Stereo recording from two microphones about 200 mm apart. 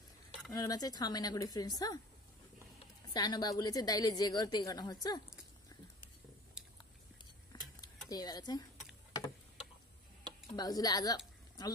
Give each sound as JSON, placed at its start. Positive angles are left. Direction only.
{"t": 0.5, "sound": "a woman's voice", "side_deg": 20}
{"t": 3.1, "sound": "a woman's voice", "side_deg": 20}
{"t": 6.6, "sound": "chewing", "side_deg": -5}
{"t": 8.1, "sound": "a woman's voice", "side_deg": 20}
{"t": 10.4, "sound": "a woman's voice", "side_deg": 20}